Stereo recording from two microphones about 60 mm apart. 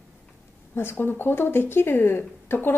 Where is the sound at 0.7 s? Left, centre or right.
Left.